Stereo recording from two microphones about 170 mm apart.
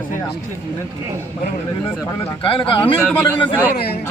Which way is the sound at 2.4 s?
30° left (ahead or behind).